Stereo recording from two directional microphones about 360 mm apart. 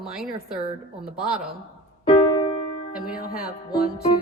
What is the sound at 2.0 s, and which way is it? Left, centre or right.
Keyboard, centre.